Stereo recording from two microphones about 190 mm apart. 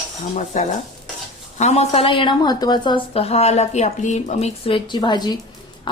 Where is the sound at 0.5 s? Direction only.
40° left (ahead or behind).